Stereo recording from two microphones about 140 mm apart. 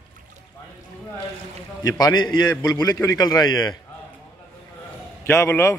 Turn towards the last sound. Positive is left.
turn(degrees=20)  # may be behind; listen again after turning